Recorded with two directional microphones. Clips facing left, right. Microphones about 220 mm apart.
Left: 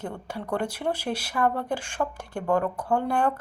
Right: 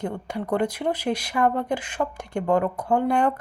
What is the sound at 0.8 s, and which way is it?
Speech, 10° right (ahead or behind).